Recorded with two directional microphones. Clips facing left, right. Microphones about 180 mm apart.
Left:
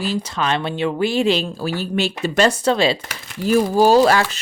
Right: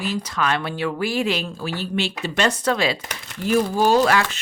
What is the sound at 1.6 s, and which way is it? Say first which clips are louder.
Speech: left 4 dB; 40° left (ahead or behind).